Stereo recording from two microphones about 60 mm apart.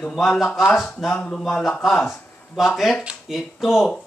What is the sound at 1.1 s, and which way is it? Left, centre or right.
Speech, centre.